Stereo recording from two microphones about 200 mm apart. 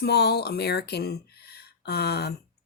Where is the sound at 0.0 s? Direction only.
55° left (ahead or behind).